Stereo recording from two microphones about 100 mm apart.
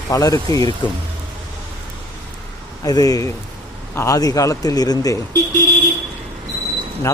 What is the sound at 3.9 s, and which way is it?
Speech, 25° left (ahead or behind).